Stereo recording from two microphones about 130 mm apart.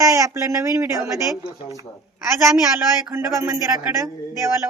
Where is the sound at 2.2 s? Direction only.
20° right (ahead or behind).